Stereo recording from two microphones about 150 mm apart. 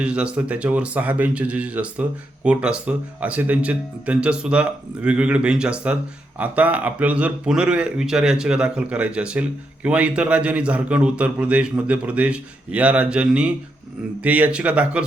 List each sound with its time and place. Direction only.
0.0 s speech: 5° right (ahead or behind)